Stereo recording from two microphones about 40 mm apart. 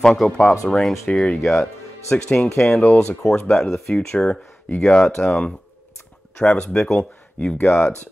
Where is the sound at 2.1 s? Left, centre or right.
Left.